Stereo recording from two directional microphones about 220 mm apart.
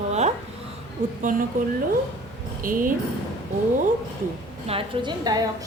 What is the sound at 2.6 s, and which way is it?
Speech, 40° right (ahead or behind).